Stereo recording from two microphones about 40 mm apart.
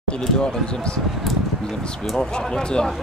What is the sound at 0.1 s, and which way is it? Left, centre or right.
Speech, left.